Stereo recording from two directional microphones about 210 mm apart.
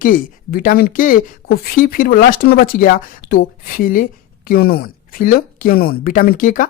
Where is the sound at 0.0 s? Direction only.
40° left (ahead or behind).